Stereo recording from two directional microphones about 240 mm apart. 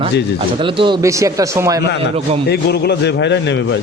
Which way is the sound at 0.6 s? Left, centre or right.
Right.